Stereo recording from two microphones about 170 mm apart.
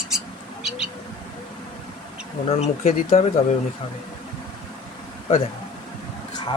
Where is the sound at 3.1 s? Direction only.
55° left (ahead or behind).